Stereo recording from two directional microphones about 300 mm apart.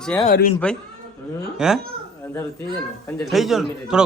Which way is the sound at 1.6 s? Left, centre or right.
Centre.